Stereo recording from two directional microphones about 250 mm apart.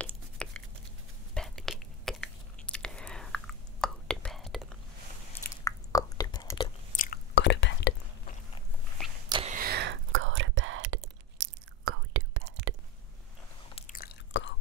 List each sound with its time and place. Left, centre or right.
0.0 s a sound: centre
1.3 s chewing: centre
5.3 s chewing: centre
7.0 s whispering: left
9.3 s a sound: right
9.6 s whispering: right
11.3 s chewing: right
13.7 s biting: left